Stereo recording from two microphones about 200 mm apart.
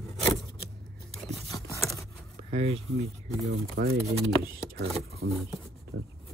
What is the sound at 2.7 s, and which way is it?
Speech, 75° right (ahead or behind).